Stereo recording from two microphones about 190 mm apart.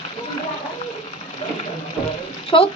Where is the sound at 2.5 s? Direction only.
25° left (ahead or behind).